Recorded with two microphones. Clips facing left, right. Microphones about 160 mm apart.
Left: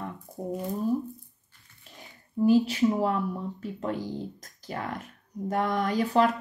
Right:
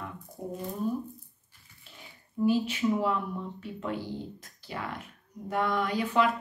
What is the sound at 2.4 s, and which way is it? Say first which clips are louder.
Speech: left 5 dB; 40° left (ahead or behind).